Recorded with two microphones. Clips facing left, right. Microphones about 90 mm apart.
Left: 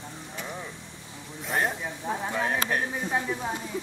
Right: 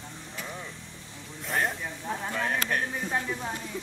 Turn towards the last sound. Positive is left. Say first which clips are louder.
# left 2 dB
turn(degrees=10)  # may be behind; listen again after turning